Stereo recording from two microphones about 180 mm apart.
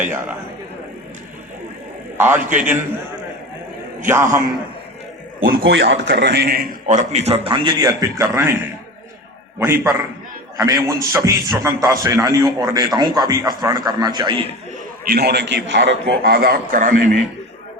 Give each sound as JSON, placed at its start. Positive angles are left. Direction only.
{"t": 0.0, "sound": "a man's voice", "side_deg": -10}
{"t": 2.1, "sound": "a man's voice", "side_deg": -10}
{"t": 4.0, "sound": "a man's voice", "side_deg": -15}
{"t": 5.4, "sound": "a man's voice", "side_deg": -55}
{"t": 10.6, "sound": "a man's voice", "side_deg": -15}
{"t": 15.0, "sound": "a man's voice", "side_deg": -60}